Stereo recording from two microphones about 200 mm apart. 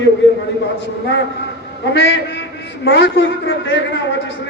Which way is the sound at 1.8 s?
60° left (ahead or behind).